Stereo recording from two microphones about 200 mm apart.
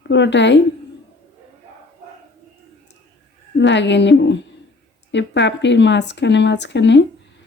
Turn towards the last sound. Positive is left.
turn(degrees=60)  # may be behind; listen again after turning